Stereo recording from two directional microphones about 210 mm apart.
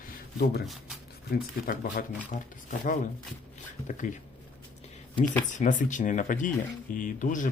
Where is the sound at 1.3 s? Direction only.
45° left (ahead or behind).